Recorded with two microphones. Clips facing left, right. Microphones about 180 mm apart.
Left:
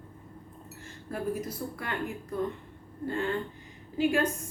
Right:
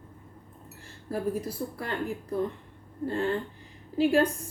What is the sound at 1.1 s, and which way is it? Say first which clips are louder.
A woman's voice: right 2 dB; 30° right (ahead or behind).